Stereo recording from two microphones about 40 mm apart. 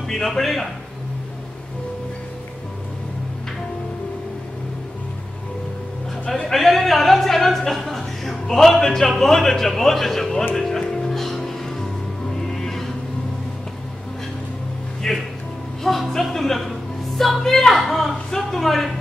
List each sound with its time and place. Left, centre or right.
0.1 s speech: centre
6.2 s a man's voice: centre
6.5 s music: centre
8.8 s a man's voice: centre
10.9 s music: centre
15.0 s a man's voice: centre